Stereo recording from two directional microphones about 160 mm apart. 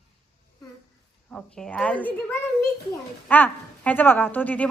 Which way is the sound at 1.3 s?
5° left (ahead or behind).